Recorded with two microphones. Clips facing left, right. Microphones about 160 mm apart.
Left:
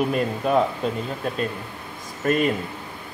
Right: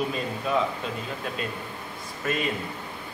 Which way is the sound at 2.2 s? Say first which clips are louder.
Left 7 dB; 50° left (ahead or behind).